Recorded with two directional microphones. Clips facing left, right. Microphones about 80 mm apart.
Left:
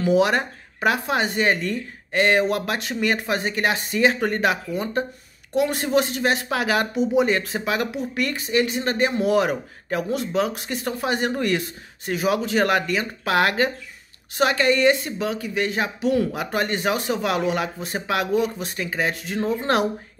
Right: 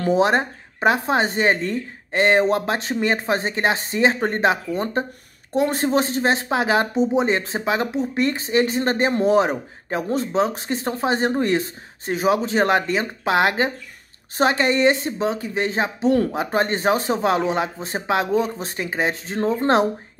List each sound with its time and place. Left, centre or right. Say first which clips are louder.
0.1 s speech: right 2 dB; right